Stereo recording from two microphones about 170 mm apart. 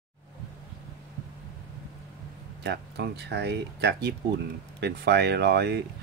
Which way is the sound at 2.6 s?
80° right.